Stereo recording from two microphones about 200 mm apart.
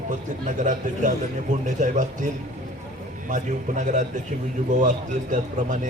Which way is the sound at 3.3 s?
40° right (ahead or behind).